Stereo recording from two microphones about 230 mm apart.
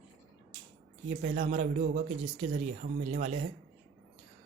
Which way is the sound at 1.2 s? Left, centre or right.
Right.